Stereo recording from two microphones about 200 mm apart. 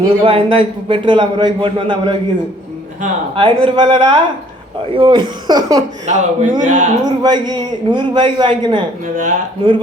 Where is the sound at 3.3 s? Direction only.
25° right (ahead or behind).